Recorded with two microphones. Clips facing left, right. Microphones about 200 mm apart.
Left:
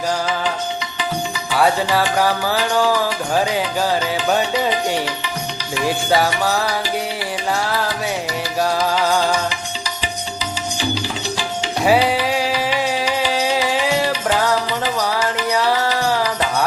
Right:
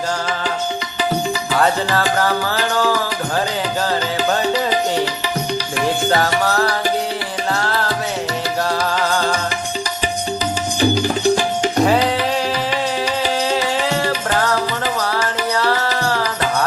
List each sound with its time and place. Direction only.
1.5 s music: 10° left (ahead or behind)
6.1 s music: 10° left (ahead or behind)
8.9 s music: 10° left (ahead or behind)
10.8 s music: 50° right (ahead or behind)
11.9 s music: 10° left (ahead or behind)